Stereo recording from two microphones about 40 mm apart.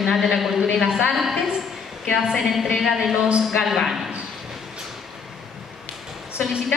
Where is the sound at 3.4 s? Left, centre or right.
Centre.